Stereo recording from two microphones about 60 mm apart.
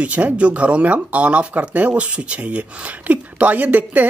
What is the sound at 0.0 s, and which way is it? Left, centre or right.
Speech, right.